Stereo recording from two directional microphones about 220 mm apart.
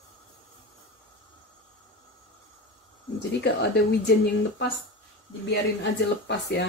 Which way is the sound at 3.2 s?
50° left (ahead or behind).